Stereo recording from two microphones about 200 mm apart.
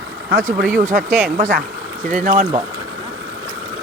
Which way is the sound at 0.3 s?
45° right (ahead or behind).